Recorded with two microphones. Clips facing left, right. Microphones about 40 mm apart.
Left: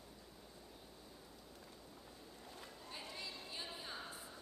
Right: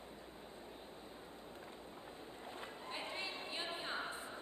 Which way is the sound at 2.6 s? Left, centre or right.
Right.